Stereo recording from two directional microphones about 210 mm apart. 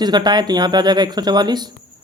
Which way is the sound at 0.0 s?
20° right (ahead or behind).